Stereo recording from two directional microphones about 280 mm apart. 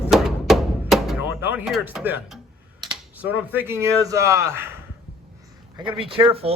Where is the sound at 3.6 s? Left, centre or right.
Centre.